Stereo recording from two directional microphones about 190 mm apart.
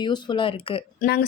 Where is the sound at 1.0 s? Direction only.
55° left (ahead or behind).